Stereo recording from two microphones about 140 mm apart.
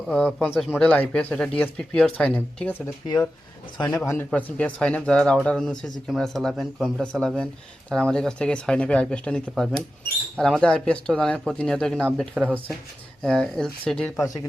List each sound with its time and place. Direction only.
0.1 s speech: 5° left (ahead or behind)
0.8 s speech: 10° left (ahead or behind)
2.8 s speech: 30° left (ahead or behind)
4.1 s speech: 10° left (ahead or behind)
12.4 s speech: 10° right (ahead or behind)
13.2 s speech: 5° left (ahead or behind)